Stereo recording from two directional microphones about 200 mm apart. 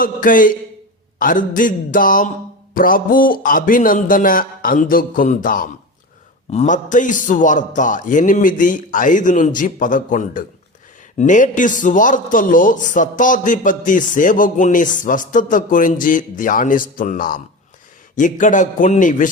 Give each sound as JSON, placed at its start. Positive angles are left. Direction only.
{"t": 0.0, "sound": "a man's voice", "side_deg": 40}